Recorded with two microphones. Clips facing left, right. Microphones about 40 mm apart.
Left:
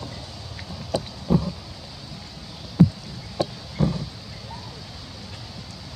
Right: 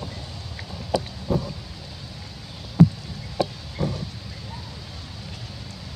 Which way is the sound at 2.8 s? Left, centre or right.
Right.